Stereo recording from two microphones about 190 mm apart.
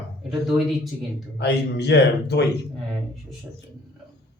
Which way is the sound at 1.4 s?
60° left (ahead or behind).